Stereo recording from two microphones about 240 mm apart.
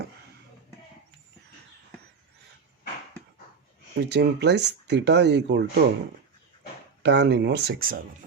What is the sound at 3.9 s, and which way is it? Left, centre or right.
Speech, right.